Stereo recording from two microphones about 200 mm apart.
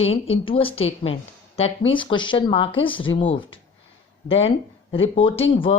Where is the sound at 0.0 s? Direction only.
30° left (ahead or behind).